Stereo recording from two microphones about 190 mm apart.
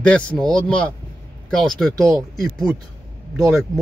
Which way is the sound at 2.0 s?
15° right (ahead or behind).